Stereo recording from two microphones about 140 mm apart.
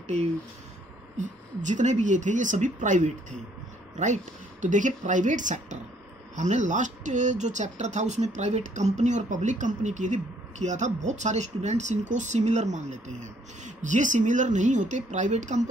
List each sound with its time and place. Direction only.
1.1 s speech: 60° right (ahead or behind)